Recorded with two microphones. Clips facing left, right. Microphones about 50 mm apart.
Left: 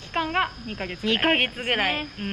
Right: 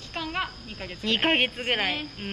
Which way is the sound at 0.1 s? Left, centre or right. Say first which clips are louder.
Left 7 dB; left.